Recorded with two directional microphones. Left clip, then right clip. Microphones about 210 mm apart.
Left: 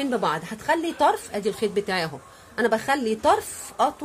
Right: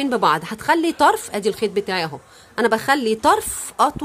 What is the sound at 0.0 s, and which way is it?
Speech, 30° right (ahead or behind).